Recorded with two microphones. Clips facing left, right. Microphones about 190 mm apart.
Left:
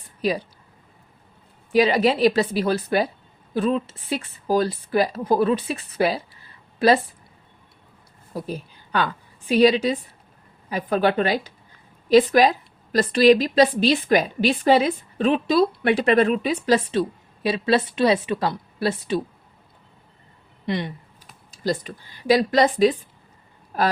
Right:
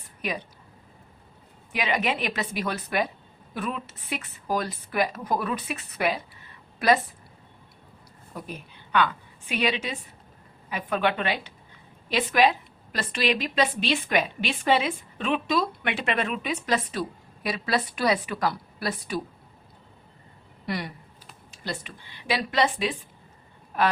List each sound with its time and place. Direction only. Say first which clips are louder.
0.2 s speech: left 8 dB; 35° left (ahead or behind)
1.7 s a woman's voice: left 9 dB; 35° left (ahead or behind)
8.3 s a sound: left 8 dB; 35° left (ahead or behind)
9.5 s a woman's voice: left 11 dB; 35° left (ahead or behind)
20.7 s speech: left 5 dB; 25° left (ahead or behind)
21.5 s a woman's voice: left 10 dB; 40° left (ahead or behind)